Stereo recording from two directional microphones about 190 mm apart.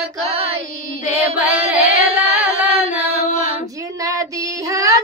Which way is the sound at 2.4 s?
10° right (ahead or behind).